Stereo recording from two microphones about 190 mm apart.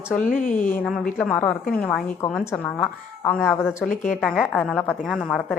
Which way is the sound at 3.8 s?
45° left (ahead or behind).